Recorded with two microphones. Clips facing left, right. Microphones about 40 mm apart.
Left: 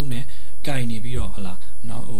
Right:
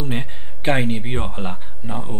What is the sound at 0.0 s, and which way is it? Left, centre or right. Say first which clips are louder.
Speech: right 5 dB; right.